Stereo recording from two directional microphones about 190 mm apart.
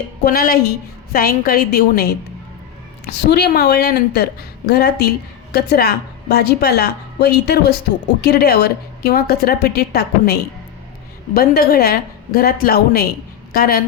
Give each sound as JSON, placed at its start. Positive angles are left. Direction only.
{"t": 0.3, "sound": "a woman's voice", "side_deg": 50}